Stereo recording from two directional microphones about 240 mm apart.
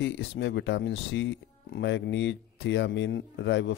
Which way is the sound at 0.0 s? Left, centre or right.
Left.